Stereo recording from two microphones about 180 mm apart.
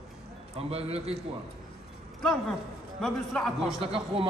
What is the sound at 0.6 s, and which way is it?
Speech, 35° right (ahead or behind).